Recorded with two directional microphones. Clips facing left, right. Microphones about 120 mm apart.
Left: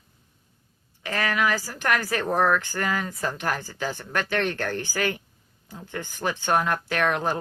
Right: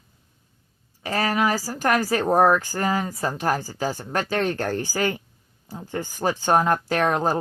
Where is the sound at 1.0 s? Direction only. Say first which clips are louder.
Right 3 dB; 35° right (ahead or behind).